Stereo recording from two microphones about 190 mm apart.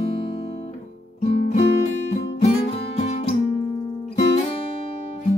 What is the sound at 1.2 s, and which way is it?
Music, 35° left (ahead or behind).